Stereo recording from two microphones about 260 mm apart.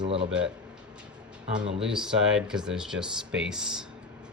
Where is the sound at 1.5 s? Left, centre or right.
Right.